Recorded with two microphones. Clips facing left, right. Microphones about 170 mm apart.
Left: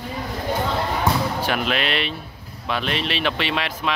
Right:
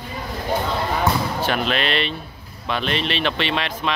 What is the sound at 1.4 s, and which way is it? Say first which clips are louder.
Speech: right 1 dB; 10° left (ahead or behind).